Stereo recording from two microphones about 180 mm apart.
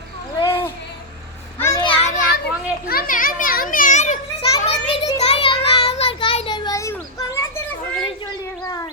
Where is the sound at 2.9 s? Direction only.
55° left (ahead or behind).